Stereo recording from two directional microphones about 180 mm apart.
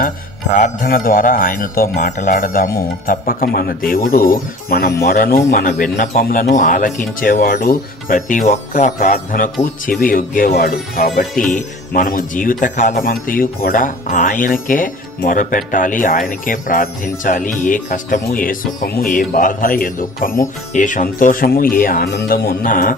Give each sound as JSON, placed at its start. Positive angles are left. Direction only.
{"t": 0.6, "sound": "speech", "side_deg": 50}